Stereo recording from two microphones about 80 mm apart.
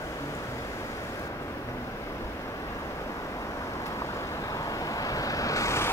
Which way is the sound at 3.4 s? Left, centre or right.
Left.